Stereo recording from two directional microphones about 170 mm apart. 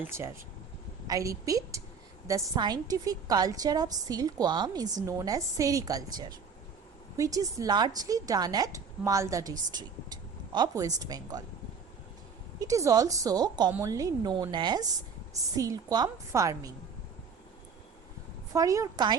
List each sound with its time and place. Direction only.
0.0 s a woman's voice: 15° right (ahead or behind)
12.5 s a woman's voice: 20° right (ahead or behind)
18.5 s a woman's voice: 20° right (ahead or behind)